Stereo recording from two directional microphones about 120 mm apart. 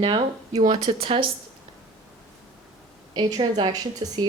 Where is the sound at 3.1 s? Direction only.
40° right (ahead or behind).